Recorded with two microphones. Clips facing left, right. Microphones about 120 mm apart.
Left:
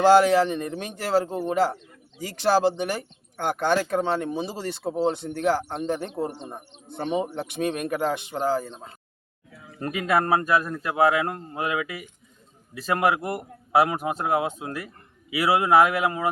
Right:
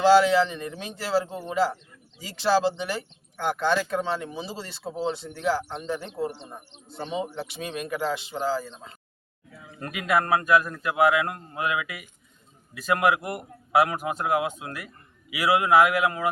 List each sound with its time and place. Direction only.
0.0 s speech: 50° left (ahead or behind)
9.8 s a man's voice: 30° left (ahead or behind)